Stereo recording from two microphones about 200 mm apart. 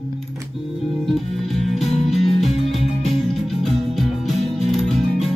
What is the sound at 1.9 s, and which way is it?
Music, 30° left (ahead or behind).